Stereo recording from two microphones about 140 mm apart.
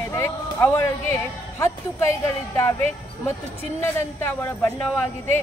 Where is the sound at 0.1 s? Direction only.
20° left (ahead or behind).